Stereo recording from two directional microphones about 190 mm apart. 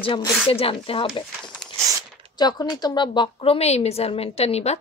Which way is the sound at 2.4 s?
20° left (ahead or behind).